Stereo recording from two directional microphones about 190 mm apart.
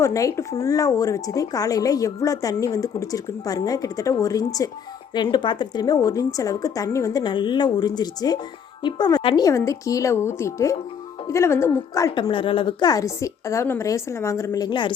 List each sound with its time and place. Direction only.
0.0 s a woman's voice: 15° left (ahead or behind)